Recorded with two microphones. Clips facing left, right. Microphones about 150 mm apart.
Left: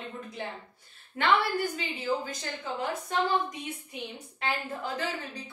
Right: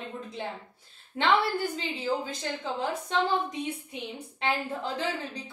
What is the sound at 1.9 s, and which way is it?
A woman's voice, 30° right (ahead or behind).